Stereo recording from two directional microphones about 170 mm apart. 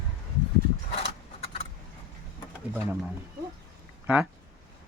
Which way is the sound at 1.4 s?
35° left (ahead or behind).